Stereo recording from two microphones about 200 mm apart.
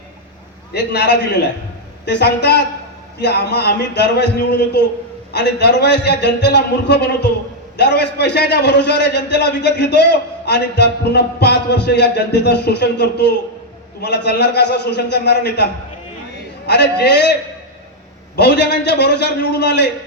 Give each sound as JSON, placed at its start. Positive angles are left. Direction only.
{"t": 0.7, "sound": "a man's voice", "side_deg": 60}
{"t": 18.3, "sound": "a man's voice", "side_deg": 60}